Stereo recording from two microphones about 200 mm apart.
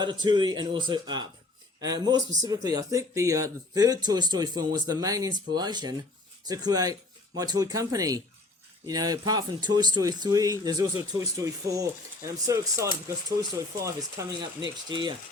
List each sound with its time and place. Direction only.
0.0 s speech: 20° right (ahead or behind)
14.2 s speech: 15° right (ahead or behind)